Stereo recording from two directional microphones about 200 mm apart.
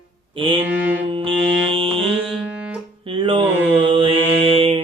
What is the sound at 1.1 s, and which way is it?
Music, 25° right (ahead or behind).